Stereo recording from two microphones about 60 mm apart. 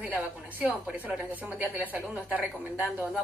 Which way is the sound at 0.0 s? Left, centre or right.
Right.